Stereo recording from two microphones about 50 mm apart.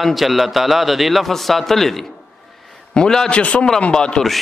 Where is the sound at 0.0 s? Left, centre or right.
Centre.